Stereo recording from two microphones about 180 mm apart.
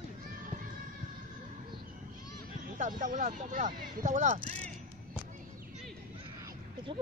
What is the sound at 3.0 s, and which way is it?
Speech, 45° right (ahead or behind).